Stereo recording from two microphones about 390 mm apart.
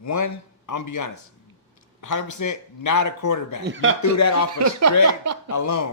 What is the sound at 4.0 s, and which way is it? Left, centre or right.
Speech, left.